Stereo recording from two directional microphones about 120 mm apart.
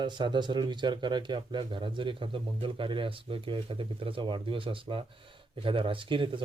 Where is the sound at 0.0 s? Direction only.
40° right (ahead or behind).